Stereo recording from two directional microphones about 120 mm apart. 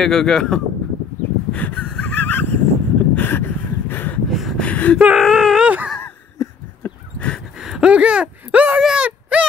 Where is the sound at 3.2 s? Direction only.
15° left (ahead or behind).